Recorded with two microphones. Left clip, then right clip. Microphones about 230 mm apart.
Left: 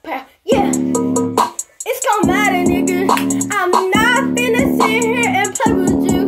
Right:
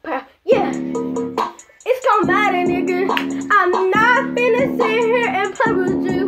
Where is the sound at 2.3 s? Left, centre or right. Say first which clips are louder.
Left 1 dB; centre.